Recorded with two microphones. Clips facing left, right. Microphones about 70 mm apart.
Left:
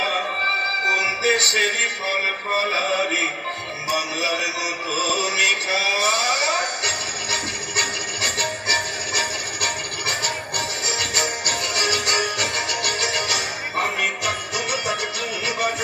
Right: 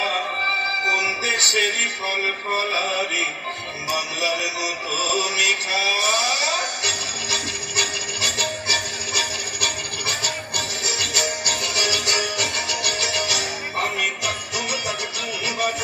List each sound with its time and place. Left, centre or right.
1.2 s music: left
4.9 s synthetic singing: left